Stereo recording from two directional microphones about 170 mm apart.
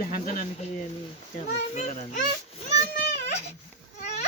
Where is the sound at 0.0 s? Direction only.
50° left (ahead or behind).